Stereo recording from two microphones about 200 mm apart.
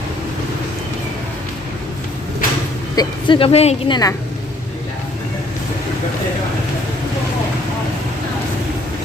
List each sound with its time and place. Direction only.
2.9 s a woman's voice: 20° left (ahead or behind)